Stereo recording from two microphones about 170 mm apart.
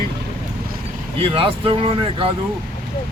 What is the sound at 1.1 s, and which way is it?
Speech, 30° right (ahead or behind).